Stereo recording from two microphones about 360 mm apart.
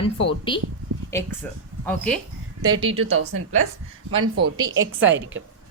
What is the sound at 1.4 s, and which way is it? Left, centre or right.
Speech, centre.